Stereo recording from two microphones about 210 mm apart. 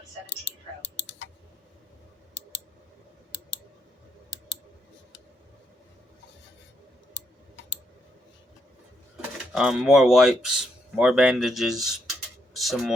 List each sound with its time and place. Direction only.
0.3 s clicking: 60° left (ahead or behind)
7.1 s a sound: 60° left (ahead or behind)
9.5 s speech: 5° right (ahead or behind)